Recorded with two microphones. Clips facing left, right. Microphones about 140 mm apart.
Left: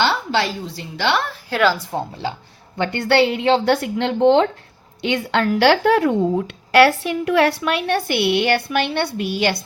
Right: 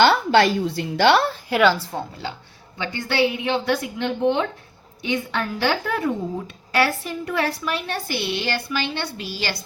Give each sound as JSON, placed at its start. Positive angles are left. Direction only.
{"t": 0.0, "sound": "a woman's voice", "side_deg": -55}
{"t": 1.9, "sound": "speech", "side_deg": 25}
{"t": 2.7, "sound": "a woman's voice", "side_deg": 60}
{"t": 5.0, "sound": "a woman's voice", "side_deg": 80}
{"t": 6.7, "sound": "a woman's voice", "side_deg": 70}